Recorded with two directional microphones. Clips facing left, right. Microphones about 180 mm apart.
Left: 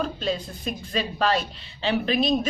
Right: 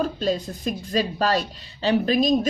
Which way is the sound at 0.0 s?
40° right (ahead or behind).